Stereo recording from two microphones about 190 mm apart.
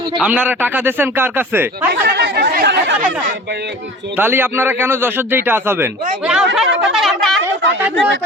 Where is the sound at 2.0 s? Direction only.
60° right (ahead or behind).